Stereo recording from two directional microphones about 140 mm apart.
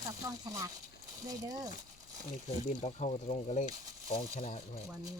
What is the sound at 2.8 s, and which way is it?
Speech, 50° left (ahead or behind).